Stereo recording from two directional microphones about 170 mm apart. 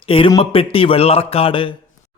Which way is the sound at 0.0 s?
30° left (ahead or behind).